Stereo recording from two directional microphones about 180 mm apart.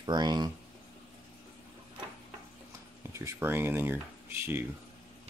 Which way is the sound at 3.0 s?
15° right (ahead or behind).